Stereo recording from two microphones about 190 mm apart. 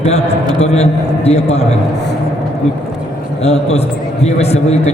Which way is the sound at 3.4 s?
35° left (ahead or behind).